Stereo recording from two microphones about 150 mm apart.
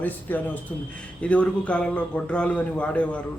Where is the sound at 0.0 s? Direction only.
10° left (ahead or behind).